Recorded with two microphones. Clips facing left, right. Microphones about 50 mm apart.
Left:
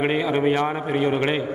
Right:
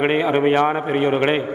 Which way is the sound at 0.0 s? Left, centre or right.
Right.